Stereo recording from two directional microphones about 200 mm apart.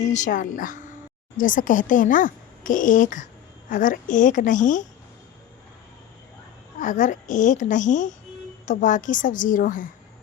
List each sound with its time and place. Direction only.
0.0 s speech: 35° left (ahead or behind)
6.7 s speech: 40° left (ahead or behind)